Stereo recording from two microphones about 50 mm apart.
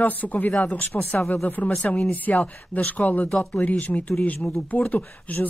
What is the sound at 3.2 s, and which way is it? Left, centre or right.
Speech, centre.